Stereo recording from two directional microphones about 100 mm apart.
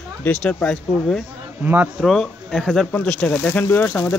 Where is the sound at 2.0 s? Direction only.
Centre (ahead or behind).